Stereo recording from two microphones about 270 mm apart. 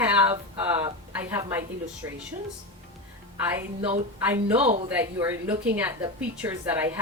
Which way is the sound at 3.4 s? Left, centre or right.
Centre.